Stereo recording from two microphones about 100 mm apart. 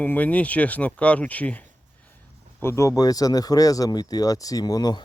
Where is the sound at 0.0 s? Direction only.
15° left (ahead or behind).